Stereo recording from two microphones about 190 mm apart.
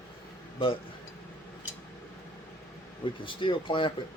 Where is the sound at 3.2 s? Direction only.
25° left (ahead or behind).